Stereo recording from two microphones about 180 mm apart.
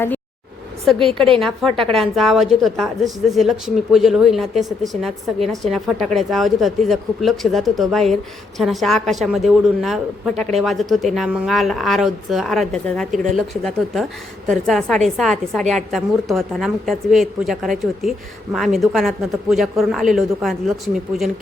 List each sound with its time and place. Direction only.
0.9 s a woman's voice: 30° right (ahead or behind)
1.4 s a woman's voice: centre (ahead or behind)